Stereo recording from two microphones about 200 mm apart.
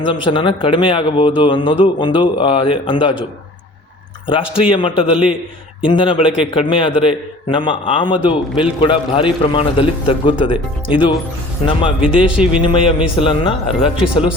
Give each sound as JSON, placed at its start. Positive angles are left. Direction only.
{"t": 0.3, "sound": "speech", "side_deg": 25}
{"t": 4.7, "sound": "speech", "side_deg": 25}
{"t": 5.1, "sound": "speech", "side_deg": -5}
{"t": 5.8, "sound": "speech", "side_deg": 25}
{"t": 11.9, "sound": "speech", "side_deg": -5}
{"t": 12.6, "sound": "speech", "side_deg": 25}
{"t": 13.9, "sound": "speech", "side_deg": -5}